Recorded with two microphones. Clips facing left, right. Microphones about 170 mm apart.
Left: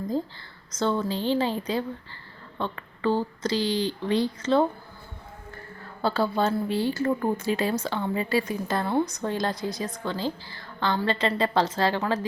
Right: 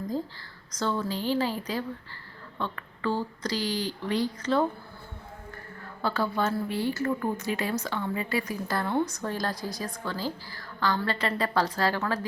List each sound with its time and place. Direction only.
0.7 s speech: 25° left (ahead or behind)
6.0 s speech: 30° left (ahead or behind)